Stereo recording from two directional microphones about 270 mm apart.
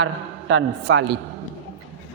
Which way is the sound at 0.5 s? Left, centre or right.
Right.